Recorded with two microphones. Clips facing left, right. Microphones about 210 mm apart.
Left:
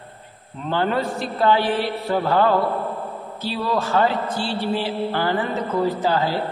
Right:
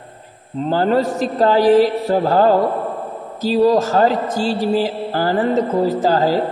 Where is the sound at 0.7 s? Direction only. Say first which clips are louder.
Right 6 dB; 40° right (ahead or behind).